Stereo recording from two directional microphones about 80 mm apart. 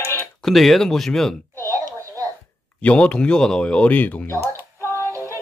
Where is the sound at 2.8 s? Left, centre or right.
Centre.